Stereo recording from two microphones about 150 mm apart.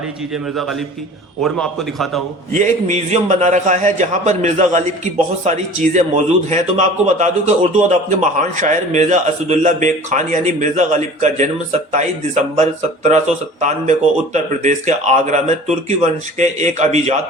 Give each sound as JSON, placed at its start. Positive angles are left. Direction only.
{"t": 1.4, "sound": "a man's voice", "side_deg": 5}
{"t": 2.5, "sound": "speech", "side_deg": -55}